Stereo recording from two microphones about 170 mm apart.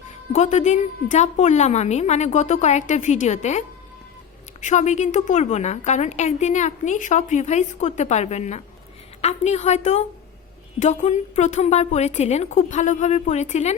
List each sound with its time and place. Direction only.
0.3 s a woman's voice: 45° left (ahead or behind)
4.6 s a woman's voice: 45° left (ahead or behind)